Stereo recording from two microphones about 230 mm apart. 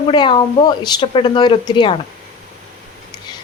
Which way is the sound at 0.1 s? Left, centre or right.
Centre.